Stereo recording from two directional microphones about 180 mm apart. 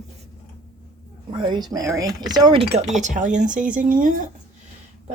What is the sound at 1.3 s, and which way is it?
Speech, 25° right (ahead or behind).